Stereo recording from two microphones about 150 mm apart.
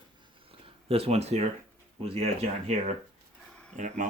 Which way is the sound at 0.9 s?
40° right (ahead or behind).